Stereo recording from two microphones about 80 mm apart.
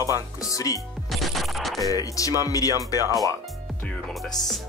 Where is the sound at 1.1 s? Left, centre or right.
Centre.